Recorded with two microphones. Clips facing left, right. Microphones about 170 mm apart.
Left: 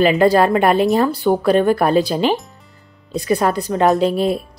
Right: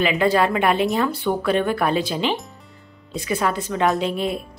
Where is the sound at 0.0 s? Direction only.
40° left (ahead or behind).